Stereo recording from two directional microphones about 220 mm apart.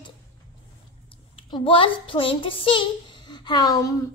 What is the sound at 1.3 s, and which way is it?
A woman's voice, 25° left (ahead or behind).